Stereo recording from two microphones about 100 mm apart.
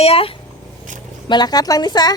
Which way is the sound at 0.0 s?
75° left (ahead or behind).